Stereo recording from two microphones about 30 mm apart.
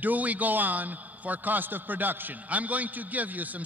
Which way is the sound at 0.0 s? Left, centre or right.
Right.